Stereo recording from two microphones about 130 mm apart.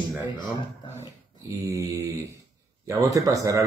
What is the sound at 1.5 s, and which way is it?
Speech, 25° right (ahead or behind).